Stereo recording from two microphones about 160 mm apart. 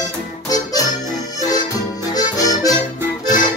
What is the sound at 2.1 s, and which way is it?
Accordion, 25° left (ahead or behind).